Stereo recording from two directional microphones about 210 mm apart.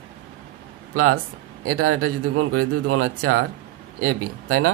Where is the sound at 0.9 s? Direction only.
90° right.